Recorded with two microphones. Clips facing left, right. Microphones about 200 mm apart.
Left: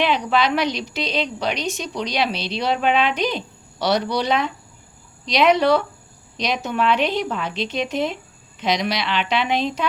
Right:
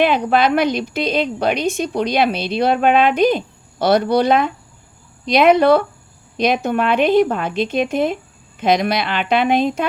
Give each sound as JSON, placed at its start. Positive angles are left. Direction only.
{"t": 0.0, "sound": "a woman's voice", "side_deg": -50}